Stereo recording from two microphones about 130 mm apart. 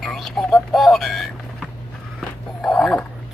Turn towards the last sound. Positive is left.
turn(degrees=5)  # may be behind; listen again after turning